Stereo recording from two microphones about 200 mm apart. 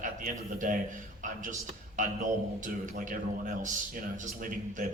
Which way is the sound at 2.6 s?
40° right (ahead or behind).